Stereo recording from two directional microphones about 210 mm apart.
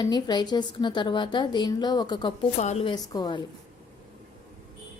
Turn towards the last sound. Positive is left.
turn(degrees=20)  # may be behind; listen again after turning